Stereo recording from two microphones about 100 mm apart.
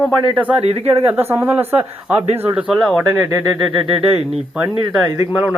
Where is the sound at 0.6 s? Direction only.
90° right.